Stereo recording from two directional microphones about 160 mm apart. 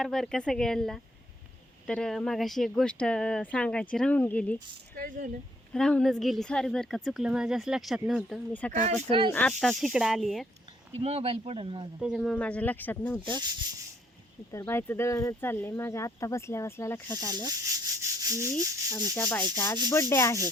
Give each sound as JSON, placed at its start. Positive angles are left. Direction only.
{"t": 0.0, "sound": "speech", "side_deg": 5}
{"t": 4.9, "sound": "speech", "side_deg": -55}
{"t": 5.7, "sound": "speech", "side_deg": 5}
{"t": 8.8, "sound": "speech", "side_deg": -45}
{"t": 9.0, "sound": "speech", "side_deg": -30}
{"t": 9.3, "sound": "speech", "side_deg": 5}
{"t": 11.0, "sound": "speech", "side_deg": -40}
{"t": 11.9, "sound": "speech", "side_deg": 0}
{"t": 14.5, "sound": "speech", "side_deg": 15}
{"t": 17.3, "sound": "rub", "side_deg": -25}
{"t": 19.1, "sound": "speech", "side_deg": 10}